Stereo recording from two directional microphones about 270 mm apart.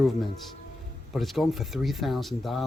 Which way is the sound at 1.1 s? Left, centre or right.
Centre.